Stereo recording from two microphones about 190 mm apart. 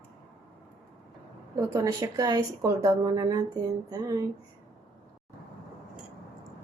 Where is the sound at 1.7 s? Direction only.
15° right (ahead or behind).